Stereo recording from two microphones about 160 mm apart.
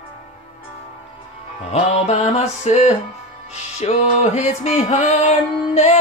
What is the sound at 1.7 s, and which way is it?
Music, 40° left (ahead or behind).